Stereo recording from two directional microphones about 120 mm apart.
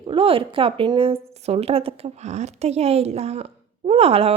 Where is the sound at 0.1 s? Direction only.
50° right (ahead or behind).